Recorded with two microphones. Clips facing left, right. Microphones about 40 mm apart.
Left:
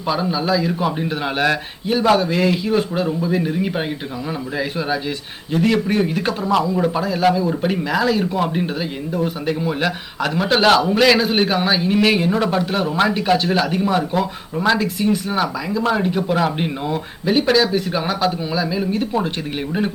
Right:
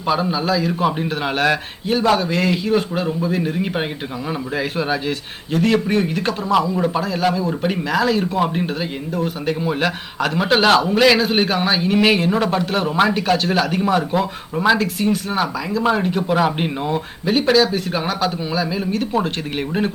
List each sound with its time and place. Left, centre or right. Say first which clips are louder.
0.1 s a man's voice: even; centre
13.2 s a man's voice: left 1 dB; centre
13.7 s a man's voice: right 1 dB; centre
14.8 s a man's voice: even; centre
18.5 s a man's voice: left 1 dB; centre